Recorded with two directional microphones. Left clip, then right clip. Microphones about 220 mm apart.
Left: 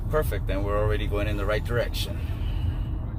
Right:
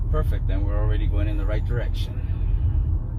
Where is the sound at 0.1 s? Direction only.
35° left (ahead or behind).